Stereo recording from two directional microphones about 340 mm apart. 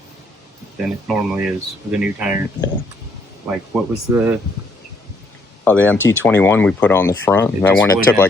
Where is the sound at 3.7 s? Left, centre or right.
Centre.